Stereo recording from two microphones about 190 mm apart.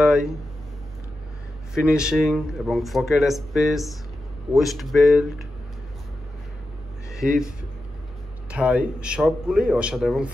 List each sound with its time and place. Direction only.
0.0 s a sound: centre (ahead or behind)
1.8 s speech: 5° right (ahead or behind)
7.1 s speech: centre (ahead or behind)
8.5 s speech: 5° right (ahead or behind)